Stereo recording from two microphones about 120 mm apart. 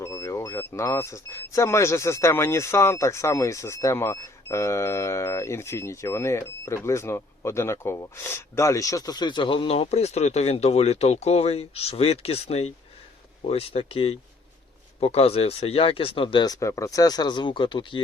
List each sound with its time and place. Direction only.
0.0 s speech: 25° left (ahead or behind); by 16.5 s 45° left (ahead or behind)
16.5 s speech: 25° left (ahead or behind); by 18.0 s 45° left (ahead or behind)